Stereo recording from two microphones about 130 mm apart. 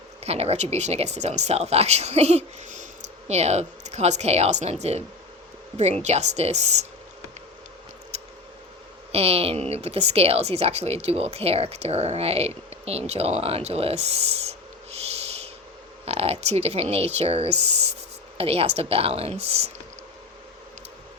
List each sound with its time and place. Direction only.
0.2 s speech: 55° right (ahead or behind); by 2.8 s 70° right (ahead or behind)
3.2 s speech: 55° right (ahead or behind)
8.1 s a sound: 55° right (ahead or behind)
9.1 s speech: 50° right (ahead or behind)
14.9 s owl: 50° right (ahead or behind)
16.0 s speech: 50° right (ahead or behind)